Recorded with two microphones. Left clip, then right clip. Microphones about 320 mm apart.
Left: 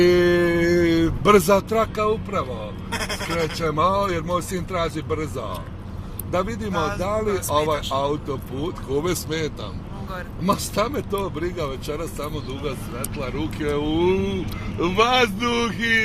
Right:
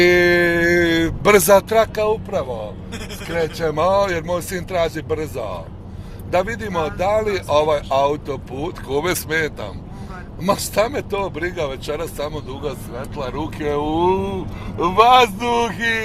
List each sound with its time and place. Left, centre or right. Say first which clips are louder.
0.0 s music: right 3 dB; right
0.4 s a sound: right 3 dB; right
3.6 s speech: right 4 dB; right